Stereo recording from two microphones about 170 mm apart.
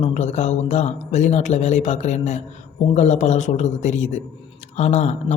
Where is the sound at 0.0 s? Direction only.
40° left (ahead or behind).